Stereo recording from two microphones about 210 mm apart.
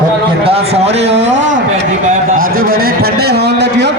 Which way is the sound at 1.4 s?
60° right (ahead or behind).